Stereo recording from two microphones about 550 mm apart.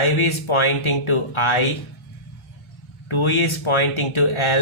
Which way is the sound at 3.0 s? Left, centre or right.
Left.